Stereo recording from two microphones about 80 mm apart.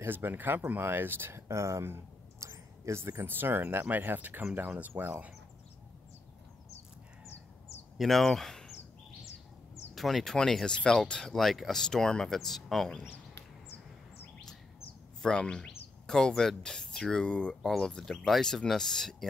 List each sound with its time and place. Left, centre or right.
0.0 s speech: right
8.0 s speech: centre
9.9 s speech: centre
15.2 s speech: centre